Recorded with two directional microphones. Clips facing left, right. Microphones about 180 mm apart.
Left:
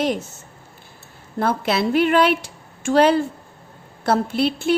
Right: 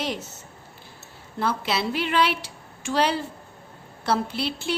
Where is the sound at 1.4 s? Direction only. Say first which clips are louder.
Left 5 dB; 50° left (ahead or behind).